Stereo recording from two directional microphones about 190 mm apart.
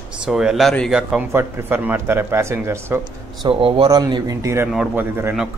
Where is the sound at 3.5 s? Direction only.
30° right (ahead or behind).